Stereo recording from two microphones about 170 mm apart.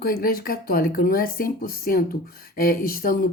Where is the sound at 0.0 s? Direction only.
60° left (ahead or behind).